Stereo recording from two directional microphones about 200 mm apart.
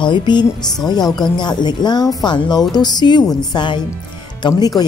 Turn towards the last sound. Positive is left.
turn(degrees=20)  # may be behind; listen again after turning